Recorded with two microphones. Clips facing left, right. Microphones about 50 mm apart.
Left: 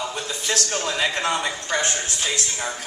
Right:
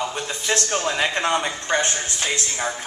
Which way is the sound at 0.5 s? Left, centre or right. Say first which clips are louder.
Right 3 dB; right.